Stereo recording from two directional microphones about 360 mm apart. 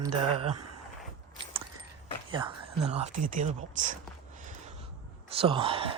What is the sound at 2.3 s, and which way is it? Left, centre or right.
Speech, centre.